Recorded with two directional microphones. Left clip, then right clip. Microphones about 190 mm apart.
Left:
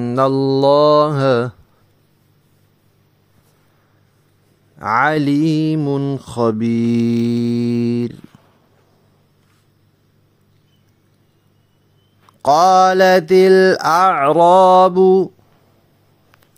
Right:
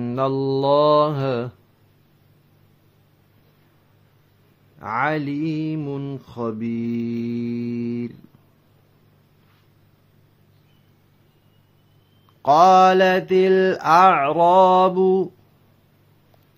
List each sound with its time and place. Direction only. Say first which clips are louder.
0.0 s mantra: left 7 dB; 35° left (ahead or behind)
4.7 s speech: left 8 dB; 45° left (ahead or behind)
12.4 s mantra: left 2 dB; 40° left (ahead or behind)